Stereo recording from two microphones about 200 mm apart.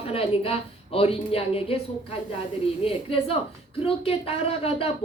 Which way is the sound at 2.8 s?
30° left (ahead or behind).